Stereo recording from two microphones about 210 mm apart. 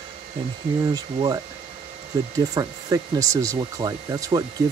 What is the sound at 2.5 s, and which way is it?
Speech, 15° right (ahead or behind).